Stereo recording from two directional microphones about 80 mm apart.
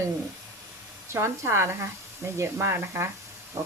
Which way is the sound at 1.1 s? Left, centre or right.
Right.